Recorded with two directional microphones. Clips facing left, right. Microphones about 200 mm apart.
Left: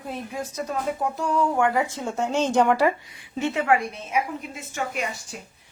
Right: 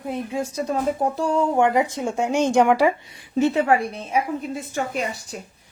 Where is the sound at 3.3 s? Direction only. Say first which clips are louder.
Right 4 dB; 35° right (ahead or behind).